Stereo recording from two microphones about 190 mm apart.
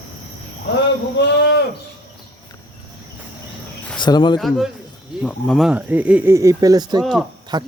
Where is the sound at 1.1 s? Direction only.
65° left (ahead or behind).